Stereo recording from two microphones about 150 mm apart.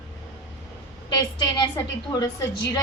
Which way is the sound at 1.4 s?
30° left (ahead or behind).